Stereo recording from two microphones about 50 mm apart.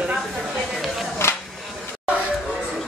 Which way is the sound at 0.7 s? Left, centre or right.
Centre.